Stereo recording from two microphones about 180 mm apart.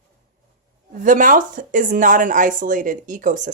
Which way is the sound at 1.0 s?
45° right (ahead or behind).